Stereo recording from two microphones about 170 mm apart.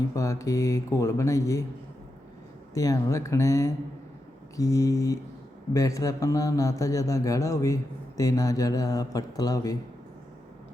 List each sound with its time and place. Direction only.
0.1 s speech: 20° left (ahead or behind)
2.7 s a man's voice: 20° left (ahead or behind)